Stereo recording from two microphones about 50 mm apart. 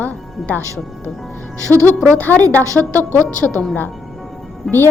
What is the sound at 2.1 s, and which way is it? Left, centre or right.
Speech, left.